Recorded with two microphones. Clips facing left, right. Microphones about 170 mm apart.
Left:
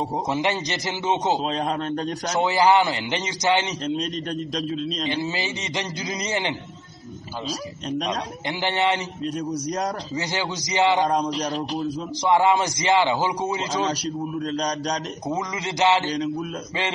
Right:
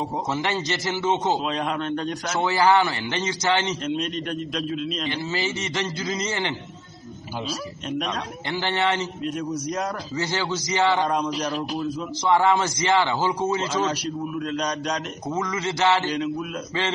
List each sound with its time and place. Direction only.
0.3 s a man's voice: 15° left (ahead or behind)
1.4 s a man's voice: 35° left (ahead or behind)
2.3 s a man's voice: 15° left (ahead or behind)
3.8 s a man's voice: 35° left (ahead or behind)
5.0 s a man's voice: 15° left (ahead or behind)
8.5 s a man's voice: 15° left (ahead or behind)
9.2 s a man's voice: 35° left (ahead or behind)
10.1 s a man's voice: 15° left (ahead or behind)
11.1 s a man's voice: 35° left (ahead or behind)
12.3 s a man's voice: 15° left (ahead or behind)
14.0 s a man's voice: 35° left (ahead or behind)
15.2 s a man's voice: 15° left (ahead or behind)
16.1 s a man's voice: 35° left (ahead or behind)